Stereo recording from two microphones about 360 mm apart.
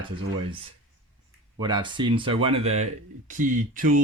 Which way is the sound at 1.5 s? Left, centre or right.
Centre.